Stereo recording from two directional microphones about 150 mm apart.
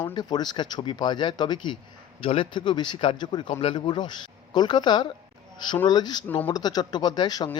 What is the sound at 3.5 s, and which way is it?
Speech, 40° left (ahead or behind).